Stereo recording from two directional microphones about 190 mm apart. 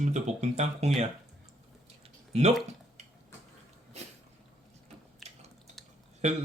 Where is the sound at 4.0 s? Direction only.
35° right (ahead or behind).